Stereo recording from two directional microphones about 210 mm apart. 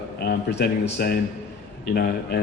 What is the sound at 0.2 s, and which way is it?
A man's voice, 50° left (ahead or behind).